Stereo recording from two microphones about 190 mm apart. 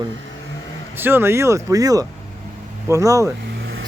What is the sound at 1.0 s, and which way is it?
A man's voice, 10° right (ahead or behind).